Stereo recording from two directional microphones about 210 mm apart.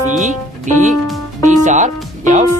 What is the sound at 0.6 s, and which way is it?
Speech, 35° right (ahead or behind).